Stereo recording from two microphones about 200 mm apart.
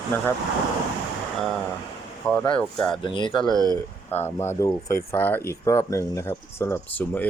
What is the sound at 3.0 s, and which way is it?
Speech, 25° left (ahead or behind).